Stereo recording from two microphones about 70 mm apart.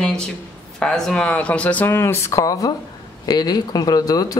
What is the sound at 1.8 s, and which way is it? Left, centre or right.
Speech, left.